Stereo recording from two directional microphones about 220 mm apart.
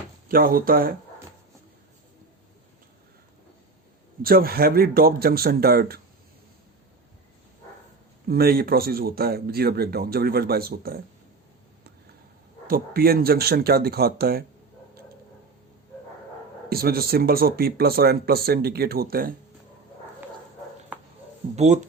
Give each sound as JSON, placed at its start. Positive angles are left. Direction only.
{"t": 0.3, "sound": "speech", "side_deg": -40}
{"t": 4.2, "sound": "speech", "side_deg": -40}
{"t": 8.3, "sound": "speech", "side_deg": -45}
{"t": 12.6, "sound": "speech", "side_deg": -40}
{"t": 16.6, "sound": "speech", "side_deg": -45}
{"t": 21.5, "sound": "speech", "side_deg": -30}